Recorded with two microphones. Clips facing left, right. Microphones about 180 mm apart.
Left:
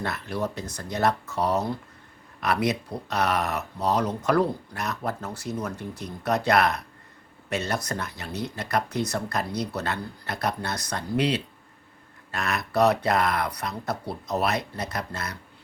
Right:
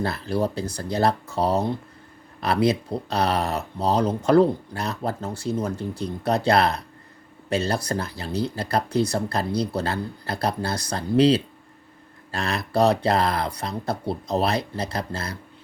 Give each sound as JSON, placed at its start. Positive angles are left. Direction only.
{"t": 0.0, "sound": "speech", "side_deg": -30}